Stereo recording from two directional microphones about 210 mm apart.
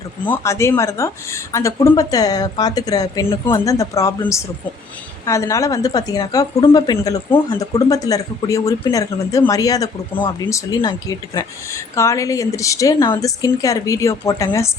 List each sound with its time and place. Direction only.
0.3 s a woman's voice: 15° left (ahead or behind)